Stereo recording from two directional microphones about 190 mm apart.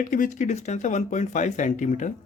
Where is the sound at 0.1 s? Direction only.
45° left (ahead or behind).